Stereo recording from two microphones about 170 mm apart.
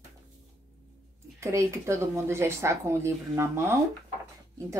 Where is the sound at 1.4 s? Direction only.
15° right (ahead or behind).